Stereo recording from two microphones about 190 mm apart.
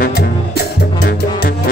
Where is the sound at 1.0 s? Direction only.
50° left (ahead or behind).